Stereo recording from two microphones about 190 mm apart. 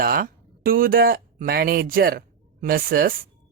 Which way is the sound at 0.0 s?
50° right (ahead or behind).